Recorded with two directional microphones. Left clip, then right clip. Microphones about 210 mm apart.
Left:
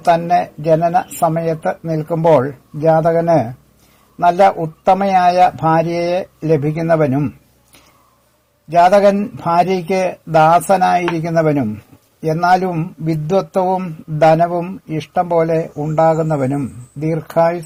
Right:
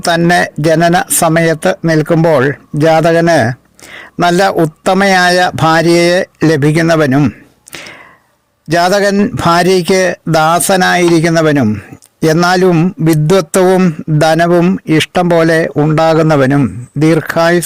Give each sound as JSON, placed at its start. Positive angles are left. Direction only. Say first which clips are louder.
{"t": 0.0, "sound": "a man's voice", "louder": "right 3 dB", "side_deg": -50}
{"t": 8.9, "sound": "a man's voice", "louder": "right 1 dB", "side_deg": -50}